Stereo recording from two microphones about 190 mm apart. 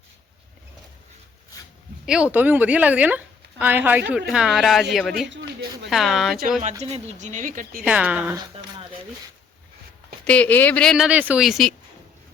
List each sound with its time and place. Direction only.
2.0 s a woman's voice: 5° right (ahead or behind)
5.3 s a sound: 65° right (ahead or behind)
5.9 s speech: centre (ahead or behind)
6.8 s speech: 35° right (ahead or behind)
7.9 s a woman's voice: 5° right (ahead or behind)
10.2 s speech: 5° left (ahead or behind)